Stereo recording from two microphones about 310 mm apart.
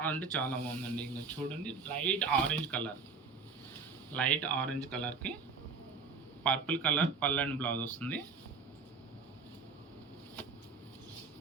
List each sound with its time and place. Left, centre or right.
0.0 s a man's voice: centre
4.1 s a man's voice: centre
6.4 s a man's voice: centre